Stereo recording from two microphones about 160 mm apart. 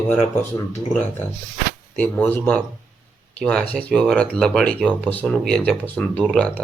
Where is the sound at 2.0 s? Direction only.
10° left (ahead or behind).